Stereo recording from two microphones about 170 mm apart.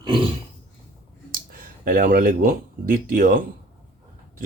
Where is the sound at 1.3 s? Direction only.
55° right (ahead or behind).